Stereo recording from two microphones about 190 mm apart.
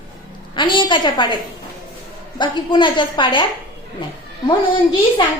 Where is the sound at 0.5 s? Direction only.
25° left (ahead or behind).